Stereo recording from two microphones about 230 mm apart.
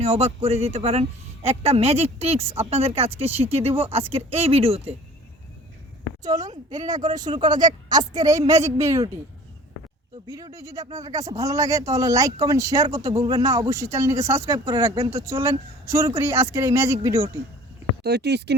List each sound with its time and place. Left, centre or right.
0.0 s speech: right
7.1 s speech: centre
10.2 s speech: centre
18.0 s speech: right